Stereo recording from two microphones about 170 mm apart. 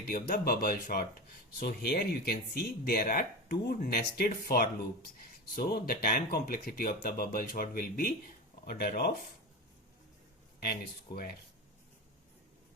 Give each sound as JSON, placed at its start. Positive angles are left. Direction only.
{"t": 0.1, "sound": "speech", "side_deg": 60}
{"t": 1.6, "sound": "speech", "side_deg": 70}
{"t": 10.6, "sound": "speech", "side_deg": 65}